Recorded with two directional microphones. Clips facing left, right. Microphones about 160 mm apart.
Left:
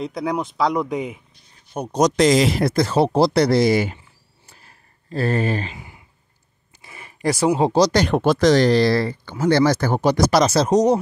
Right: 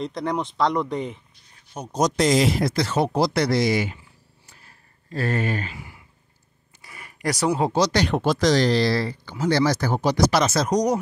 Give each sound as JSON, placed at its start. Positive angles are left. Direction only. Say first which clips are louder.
{"t": 0.0, "sound": "speech", "louder": "left 2 dB", "side_deg": 5}
{"t": 1.7, "sound": "speech", "louder": "left 4 dB", "side_deg": 60}
{"t": 2.7, "sound": "speech", "louder": "left 5 dB", "side_deg": 45}
{"t": 3.0, "sound": "speech", "louder": "left 5 dB", "side_deg": 30}
{"t": 4.5, "sound": "a sound", "louder": "left 3 dB", "side_deg": 30}
{"t": 7.8, "sound": "speech", "louder": "left 4 dB", "side_deg": 45}
{"t": 10.3, "sound": "speech", "louder": "left 5 dB", "side_deg": 30}